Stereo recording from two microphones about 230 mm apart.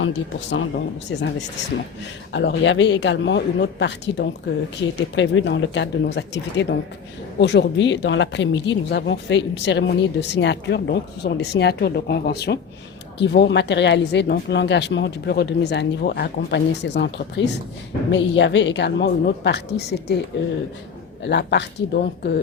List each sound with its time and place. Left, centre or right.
0.0 s speech: left
2.3 s speech: left
21.2 s speech: left